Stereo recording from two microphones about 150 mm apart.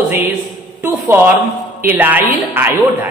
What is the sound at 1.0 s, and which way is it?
A man's voice, 15° right (ahead or behind).